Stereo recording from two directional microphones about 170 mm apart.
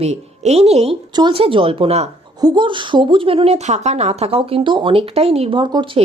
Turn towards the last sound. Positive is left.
turn(degrees=-30)  # may be behind; listen again after turning